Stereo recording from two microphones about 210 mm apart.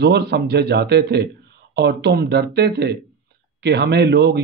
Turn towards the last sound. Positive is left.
turn(degrees=-50)  # may be behind; listen again after turning